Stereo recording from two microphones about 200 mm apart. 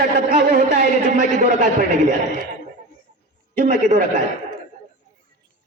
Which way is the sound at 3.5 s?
40° right (ahead or behind).